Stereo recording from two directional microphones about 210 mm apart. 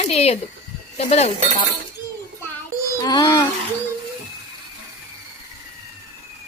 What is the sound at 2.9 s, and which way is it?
Speech, 20° left (ahead or behind).